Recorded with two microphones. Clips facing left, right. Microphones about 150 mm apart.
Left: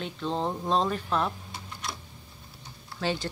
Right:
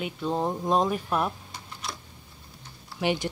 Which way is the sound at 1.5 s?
Centre (ahead or behind).